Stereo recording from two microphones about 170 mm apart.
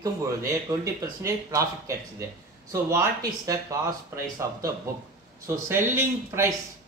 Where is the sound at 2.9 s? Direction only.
20° right (ahead or behind).